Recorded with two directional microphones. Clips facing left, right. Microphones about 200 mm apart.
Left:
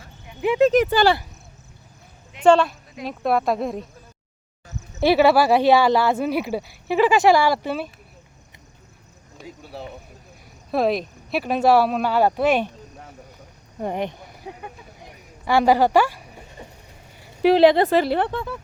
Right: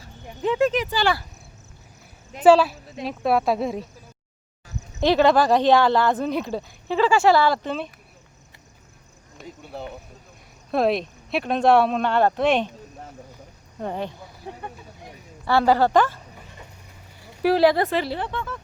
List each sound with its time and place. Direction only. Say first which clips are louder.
0.7 s speech: left 8 dB; 40° left (ahead or behind)
2.4 s speech: right 1 dB; 5° right (ahead or behind)
5.0 s speech: left 2 dB; 10° left (ahead or behind)
9.4 s speech: right 1 dB; centre (ahead or behind)
13.8 s speech: left 3 dB; 15° left (ahead or behind)
15.4 s speech: left 1 dB; 15° left (ahead or behind)
17.4 s speech: left 4 dB; 20° left (ahead or behind)
17.8 s speech: left 6 dB; 40° left (ahead or behind)